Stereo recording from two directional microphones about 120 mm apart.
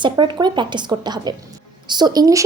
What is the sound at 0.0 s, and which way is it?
Speech, 40° right (ahead or behind).